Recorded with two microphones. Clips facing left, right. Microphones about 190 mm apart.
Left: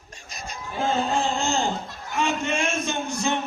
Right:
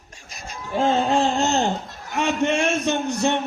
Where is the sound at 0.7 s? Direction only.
70° right (ahead or behind).